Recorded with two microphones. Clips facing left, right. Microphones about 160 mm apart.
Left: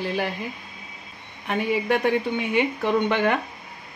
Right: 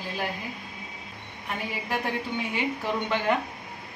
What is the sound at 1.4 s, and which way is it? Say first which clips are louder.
Speech: left 10 dB; 70° left (ahead or behind).